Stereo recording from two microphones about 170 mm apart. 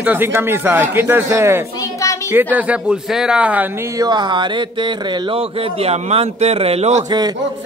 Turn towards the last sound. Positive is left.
turn(degrees=-40)  # may be behind; listen again after turning